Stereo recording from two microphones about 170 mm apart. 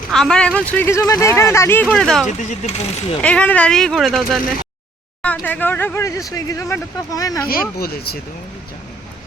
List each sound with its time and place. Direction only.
0.1 s speech: 5° left (ahead or behind)
1.9 s speech: centre (ahead or behind)
2.2 s speech: 45° left (ahead or behind)
3.2 s speech: 10° left (ahead or behind)
7.4 s speech: 60° left (ahead or behind)